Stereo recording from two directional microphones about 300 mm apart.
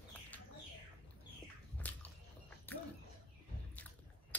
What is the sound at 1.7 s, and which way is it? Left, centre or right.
Biting, centre.